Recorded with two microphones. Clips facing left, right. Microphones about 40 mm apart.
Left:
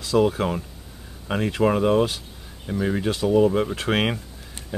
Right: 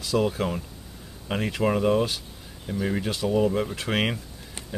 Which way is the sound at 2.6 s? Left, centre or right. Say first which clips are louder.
Left 3 dB; centre.